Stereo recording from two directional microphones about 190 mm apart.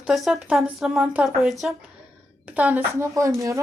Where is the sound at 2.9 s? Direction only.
15° right (ahead or behind).